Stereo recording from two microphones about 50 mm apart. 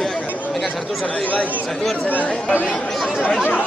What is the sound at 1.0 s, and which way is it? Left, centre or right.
Speech, left.